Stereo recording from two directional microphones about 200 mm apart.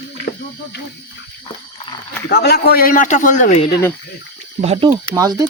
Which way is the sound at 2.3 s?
55° left (ahead or behind).